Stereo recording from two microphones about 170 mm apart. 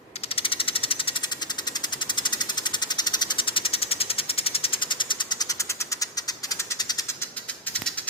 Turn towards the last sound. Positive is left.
turn(degrees=20)  # may be behind; listen again after turning